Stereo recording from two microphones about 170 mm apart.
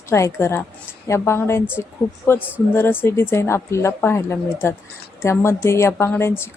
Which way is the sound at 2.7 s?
15° left (ahead or behind).